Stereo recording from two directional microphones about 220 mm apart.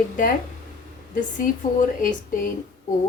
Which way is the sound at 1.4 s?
40° left (ahead or behind).